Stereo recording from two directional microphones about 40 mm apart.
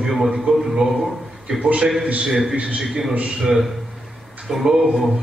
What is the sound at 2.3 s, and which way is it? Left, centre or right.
Speech, centre.